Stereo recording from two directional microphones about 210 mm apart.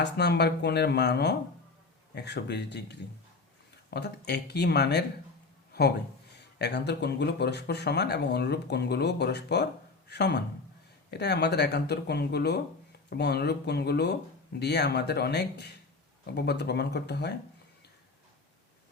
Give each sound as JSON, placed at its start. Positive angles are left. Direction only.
{"t": 0.0, "sound": "speech", "side_deg": 55}
{"t": 6.6, "sound": "speech", "side_deg": 55}